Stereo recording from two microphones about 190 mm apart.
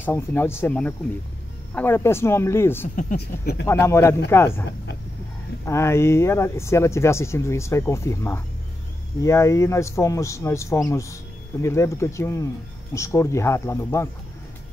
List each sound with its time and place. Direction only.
0.0 s speech: 10° left (ahead or behind)
3.2 s speech: 60° left (ahead or behind)
3.6 s speech: 15° left (ahead or behind)
5.7 s speech: 15° left (ahead or behind)